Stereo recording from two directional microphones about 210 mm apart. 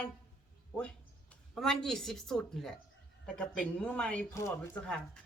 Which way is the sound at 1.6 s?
Centre (ahead or behind).